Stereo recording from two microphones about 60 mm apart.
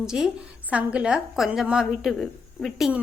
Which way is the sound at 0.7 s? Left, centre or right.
Right.